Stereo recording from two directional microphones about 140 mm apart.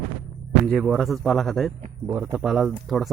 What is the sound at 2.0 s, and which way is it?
Speech, 15° right (ahead or behind).